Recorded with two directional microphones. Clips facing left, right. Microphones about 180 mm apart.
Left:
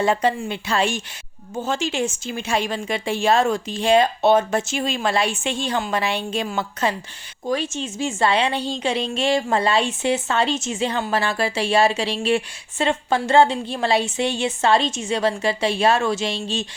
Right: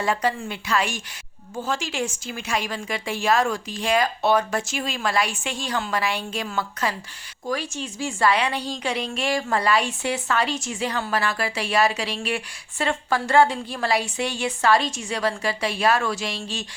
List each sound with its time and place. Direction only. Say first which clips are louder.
0.0 s a woman's voice: left 4 dB; 25° left (ahead or behind)